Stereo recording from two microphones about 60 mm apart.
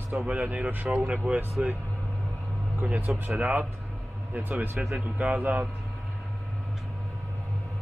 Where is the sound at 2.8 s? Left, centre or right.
Right.